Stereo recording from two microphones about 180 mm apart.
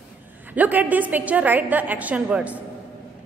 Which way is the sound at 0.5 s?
10° right (ahead or behind).